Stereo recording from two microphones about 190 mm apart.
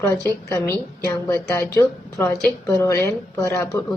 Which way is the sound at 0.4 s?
15° left (ahead or behind).